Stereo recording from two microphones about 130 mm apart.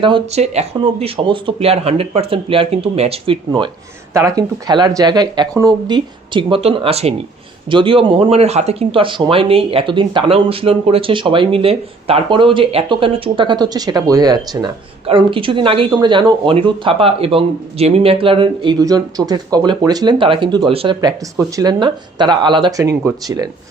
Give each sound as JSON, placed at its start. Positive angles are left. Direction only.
{"t": 0.3, "sound": "speech", "side_deg": -55}
{"t": 4.1, "sound": "speech", "side_deg": -25}
{"t": 7.7, "sound": "speech", "side_deg": -40}
{"t": 15.0, "sound": "speech", "side_deg": -40}
{"t": 21.0, "sound": "speech", "side_deg": -25}
{"t": 22.8, "sound": "speech", "side_deg": -25}